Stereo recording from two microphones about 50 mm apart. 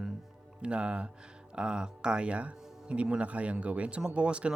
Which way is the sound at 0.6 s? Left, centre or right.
Right.